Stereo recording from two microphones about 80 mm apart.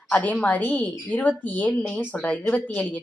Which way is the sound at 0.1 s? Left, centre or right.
Centre.